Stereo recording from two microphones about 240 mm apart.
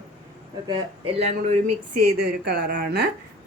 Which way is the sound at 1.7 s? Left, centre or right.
Right.